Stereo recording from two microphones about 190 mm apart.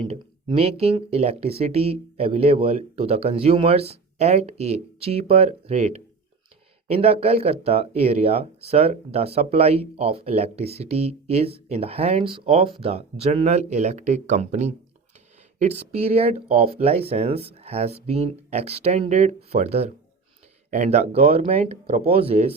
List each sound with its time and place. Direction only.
0.1 s speech: 30° right (ahead or behind)